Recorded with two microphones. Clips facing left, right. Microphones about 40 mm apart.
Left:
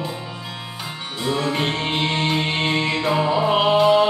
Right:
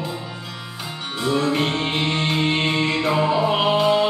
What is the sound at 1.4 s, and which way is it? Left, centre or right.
Music, left.